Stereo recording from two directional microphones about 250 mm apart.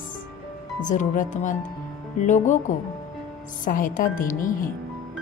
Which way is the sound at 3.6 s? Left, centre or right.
Left.